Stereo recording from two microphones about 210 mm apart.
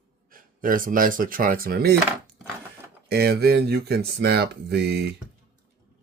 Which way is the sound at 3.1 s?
50° right (ahead or behind).